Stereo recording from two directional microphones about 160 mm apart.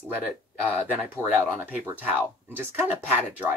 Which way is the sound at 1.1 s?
10° right (ahead or behind).